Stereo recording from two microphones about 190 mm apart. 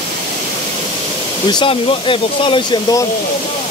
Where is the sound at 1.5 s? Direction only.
25° left (ahead or behind).